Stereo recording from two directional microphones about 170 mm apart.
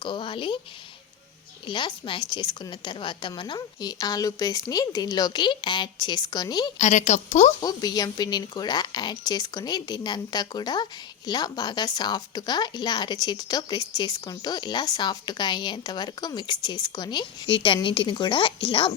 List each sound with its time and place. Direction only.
0.0 s speech: 30° left (ahead or behind)
1.6 s speech: 30° left (ahead or behind)
6.7 s speech: 45° left (ahead or behind)
7.6 s speech: 20° left (ahead or behind)